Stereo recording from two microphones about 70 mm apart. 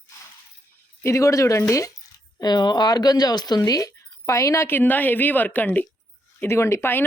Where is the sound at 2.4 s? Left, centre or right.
Left.